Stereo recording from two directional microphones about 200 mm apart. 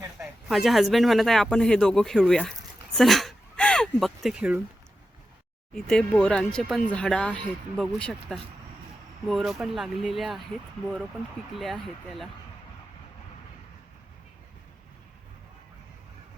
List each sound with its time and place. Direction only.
0.2 s speech: centre (ahead or behind)
2.9 s a sound: centre (ahead or behind)
5.7 s speech: 5° left (ahead or behind)
11.5 s speech: centre (ahead or behind)